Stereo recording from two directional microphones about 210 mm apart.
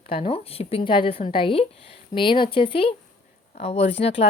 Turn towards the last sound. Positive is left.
turn(degrees=30)  # may be behind; listen again after turning